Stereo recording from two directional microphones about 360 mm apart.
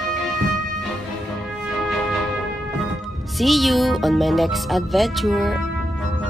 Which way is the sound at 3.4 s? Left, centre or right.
Centre.